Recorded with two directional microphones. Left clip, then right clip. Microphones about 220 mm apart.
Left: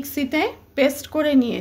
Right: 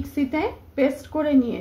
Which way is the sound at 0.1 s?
50° left (ahead or behind).